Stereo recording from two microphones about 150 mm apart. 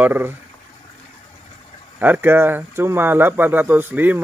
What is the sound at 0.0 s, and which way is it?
Speech, 15° right (ahead or behind).